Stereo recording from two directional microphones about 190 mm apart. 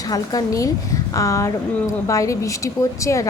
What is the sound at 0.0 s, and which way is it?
A woman's voice, 20° left (ahead or behind).